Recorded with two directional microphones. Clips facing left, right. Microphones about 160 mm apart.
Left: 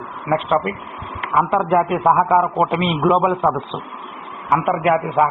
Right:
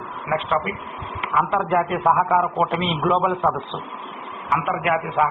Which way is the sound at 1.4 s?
15° left (ahead or behind).